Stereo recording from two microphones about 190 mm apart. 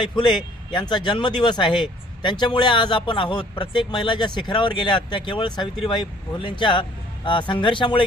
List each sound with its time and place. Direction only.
0.2 s speech: 25° left (ahead or behind)